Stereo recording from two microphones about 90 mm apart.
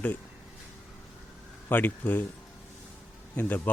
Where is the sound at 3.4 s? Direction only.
20° left (ahead or behind).